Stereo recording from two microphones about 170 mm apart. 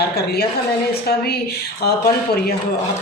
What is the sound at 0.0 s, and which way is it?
A woman's voice, 70° left (ahead or behind).